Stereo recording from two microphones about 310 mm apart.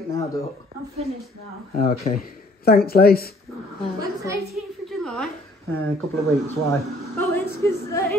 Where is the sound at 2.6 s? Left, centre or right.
Left.